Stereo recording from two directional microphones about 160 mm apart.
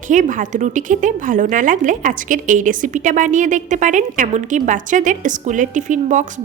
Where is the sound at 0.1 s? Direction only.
55° right (ahead or behind).